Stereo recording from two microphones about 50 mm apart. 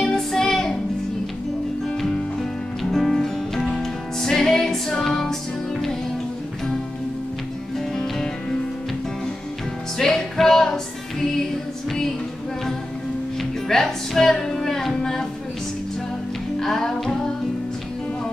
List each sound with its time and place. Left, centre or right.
0.0 s music: centre
1.9 s music: centre
7.9 s music: centre
9.9 s music: centre
13.4 s music: centre
16.5 s music: centre